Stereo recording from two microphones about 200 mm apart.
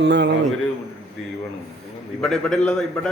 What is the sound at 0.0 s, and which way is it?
Speech, 60° right (ahead or behind).